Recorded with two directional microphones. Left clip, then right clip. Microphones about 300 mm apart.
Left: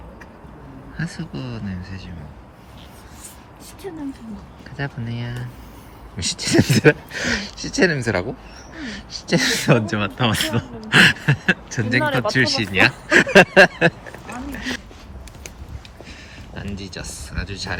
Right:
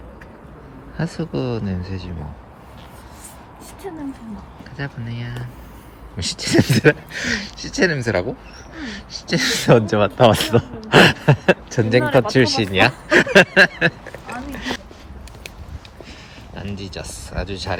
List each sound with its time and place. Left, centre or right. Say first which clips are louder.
0.9 s speech: right 7 dB; centre
3.8 s speech: right 1 dB; centre
16.6 s speech: right 1 dB; centre